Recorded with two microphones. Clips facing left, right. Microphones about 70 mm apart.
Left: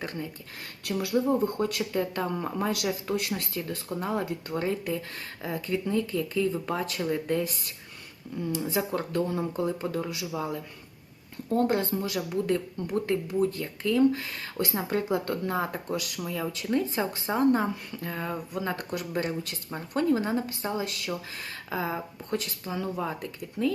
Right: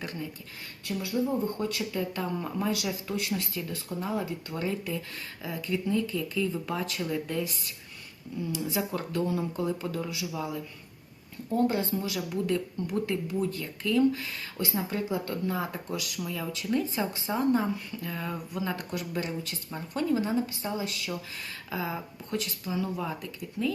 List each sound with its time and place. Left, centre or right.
0.8 s speech: left
1.5 s speech: left
4.5 s speech: left
11.5 s speech: left